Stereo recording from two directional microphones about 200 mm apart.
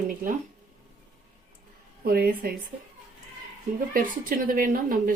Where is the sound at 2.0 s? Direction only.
50° right (ahead or behind).